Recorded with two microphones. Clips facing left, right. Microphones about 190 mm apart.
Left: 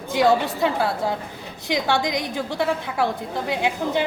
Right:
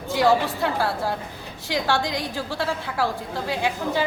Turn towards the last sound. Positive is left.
turn(degrees=20)  # may be behind; listen again after turning